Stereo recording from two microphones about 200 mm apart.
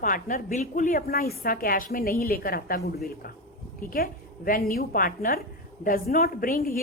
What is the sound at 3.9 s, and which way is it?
A woman's voice, 45° left (ahead or behind).